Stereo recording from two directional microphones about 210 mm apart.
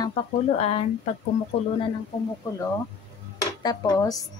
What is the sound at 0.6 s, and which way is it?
Speech, 30° left (ahead or behind).